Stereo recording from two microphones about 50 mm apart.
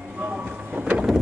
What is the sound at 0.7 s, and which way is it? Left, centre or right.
Wind noise, right.